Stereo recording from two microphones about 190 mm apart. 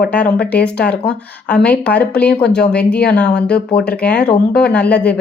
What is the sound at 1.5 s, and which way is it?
Speech, 5° left (ahead or behind).